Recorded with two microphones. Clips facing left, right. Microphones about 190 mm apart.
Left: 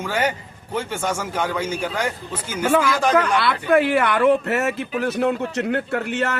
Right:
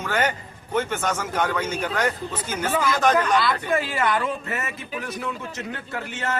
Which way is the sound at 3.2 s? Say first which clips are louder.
Left 2 dB; 65° left (ahead or behind).